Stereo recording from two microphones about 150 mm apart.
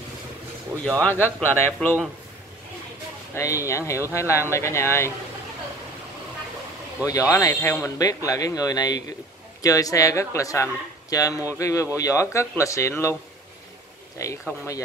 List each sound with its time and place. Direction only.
0.8 s speech: 10° left (ahead or behind)
3.3 s speech: 20° left (ahead or behind)
7.1 s speech: 20° left (ahead or behind)
14.2 s speech: 20° left (ahead or behind)